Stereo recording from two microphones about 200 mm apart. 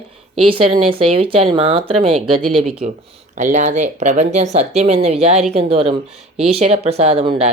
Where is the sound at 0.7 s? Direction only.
30° right (ahead or behind).